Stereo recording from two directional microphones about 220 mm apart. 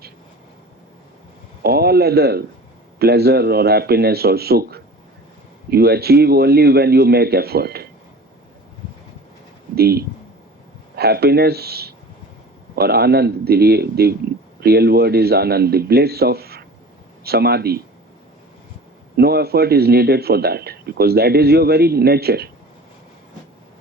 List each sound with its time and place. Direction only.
1.6 s a man's voice: 45° right (ahead or behind)
9.7 s a man's voice: 45° right (ahead or behind)
19.1 s a man's voice: 45° right (ahead or behind)